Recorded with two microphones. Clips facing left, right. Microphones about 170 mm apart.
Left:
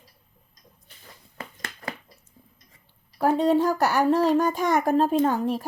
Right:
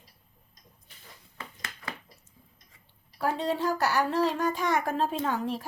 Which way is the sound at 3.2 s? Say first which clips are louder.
Left 8 dB; 50° left (ahead or behind).